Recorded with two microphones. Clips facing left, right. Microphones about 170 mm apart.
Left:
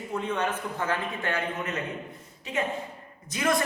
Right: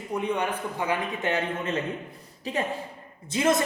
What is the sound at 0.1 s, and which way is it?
A man's voice, 15° right (ahead or behind).